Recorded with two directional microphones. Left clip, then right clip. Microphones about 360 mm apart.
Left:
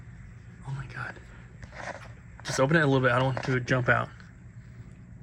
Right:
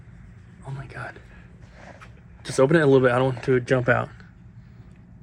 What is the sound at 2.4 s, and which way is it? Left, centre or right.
Speech, centre.